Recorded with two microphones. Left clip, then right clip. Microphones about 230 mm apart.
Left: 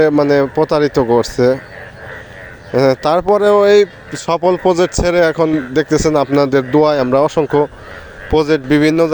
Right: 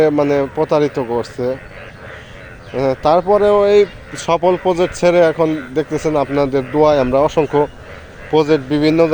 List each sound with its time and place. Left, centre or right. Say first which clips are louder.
0.0 s speech: left 2 dB; centre
2.8 s speech: even; left